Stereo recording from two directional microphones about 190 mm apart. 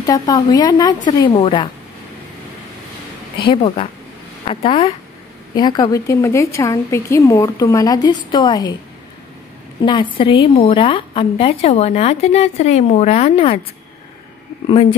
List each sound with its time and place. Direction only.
0.0 s a woman's voice: 20° left (ahead or behind)
3.3 s a woman's voice: 25° left (ahead or behind)
9.8 s a woman's voice: 25° left (ahead or behind)